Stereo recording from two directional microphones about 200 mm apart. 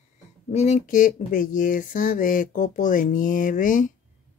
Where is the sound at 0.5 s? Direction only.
35° left (ahead or behind).